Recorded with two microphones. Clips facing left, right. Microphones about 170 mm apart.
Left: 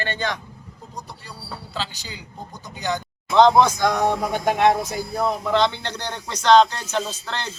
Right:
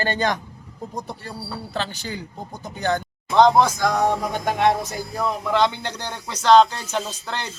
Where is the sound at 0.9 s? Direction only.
55° right (ahead or behind).